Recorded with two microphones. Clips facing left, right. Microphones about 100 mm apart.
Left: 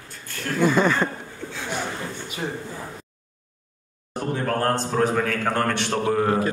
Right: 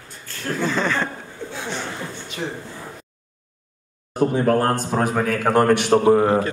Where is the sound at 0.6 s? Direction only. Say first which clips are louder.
Left 3 dB; 10° left (ahead or behind).